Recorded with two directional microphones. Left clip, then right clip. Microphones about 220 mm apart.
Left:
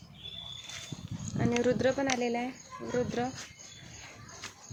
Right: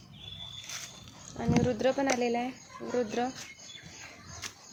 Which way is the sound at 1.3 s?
20° left (ahead or behind).